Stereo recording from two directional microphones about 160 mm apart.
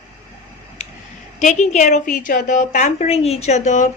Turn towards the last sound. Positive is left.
turn(degrees=50)  # may be behind; listen again after turning